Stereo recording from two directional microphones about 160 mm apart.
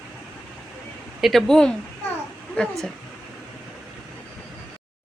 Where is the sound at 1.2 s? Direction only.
Centre (ahead or behind).